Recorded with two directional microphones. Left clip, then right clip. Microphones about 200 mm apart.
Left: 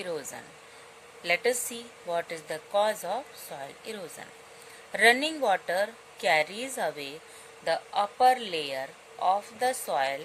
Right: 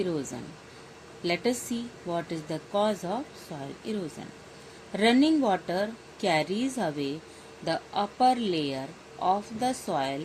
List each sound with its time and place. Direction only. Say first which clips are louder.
0.0 s a woman's voice: right 3 dB; 35° left (ahead or behind)
4.9 s a woman's voice: left 1 dB; 30° left (ahead or behind)